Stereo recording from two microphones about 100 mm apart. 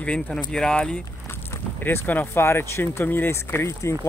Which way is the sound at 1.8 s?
15° left (ahead or behind).